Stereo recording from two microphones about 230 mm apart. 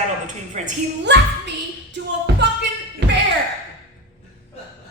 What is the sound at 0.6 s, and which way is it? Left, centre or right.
Speech, right.